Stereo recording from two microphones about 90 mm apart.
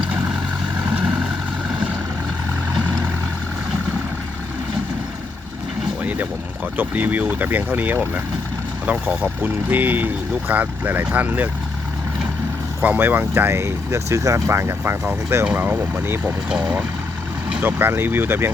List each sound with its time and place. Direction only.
0.0 s vehicle: 15° right (ahead or behind)
6.0 s a sound: 20° right (ahead or behind)
6.7 s speech: 20° right (ahead or behind)
12.8 s speech: 20° right (ahead or behind)
15.4 s speech: 15° right (ahead or behind)
17.6 s speech: 20° right (ahead or behind)